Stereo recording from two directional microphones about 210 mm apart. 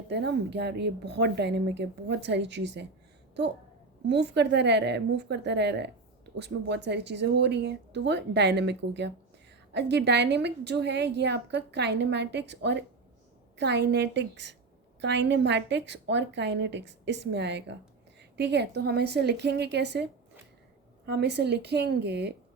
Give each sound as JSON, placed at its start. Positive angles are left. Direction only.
{"t": 0.1, "sound": "a woman's voice", "side_deg": -55}
{"t": 4.0, "sound": "a woman's voice", "side_deg": -55}
{"t": 21.1, "sound": "a woman's voice", "side_deg": -55}